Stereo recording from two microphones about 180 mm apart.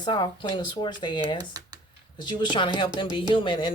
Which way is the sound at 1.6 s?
20° right (ahead or behind).